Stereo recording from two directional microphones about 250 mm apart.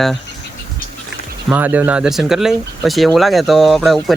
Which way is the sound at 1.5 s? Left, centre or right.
Centre.